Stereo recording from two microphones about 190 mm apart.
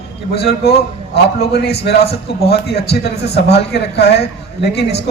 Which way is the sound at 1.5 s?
60° left (ahead or behind).